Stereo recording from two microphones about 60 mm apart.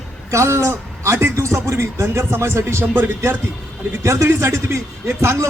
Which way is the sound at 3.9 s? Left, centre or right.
Right.